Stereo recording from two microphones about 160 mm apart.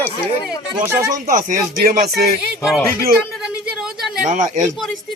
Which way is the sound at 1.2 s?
55° right (ahead or behind).